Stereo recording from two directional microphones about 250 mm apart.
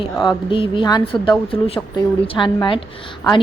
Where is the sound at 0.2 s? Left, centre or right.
Centre.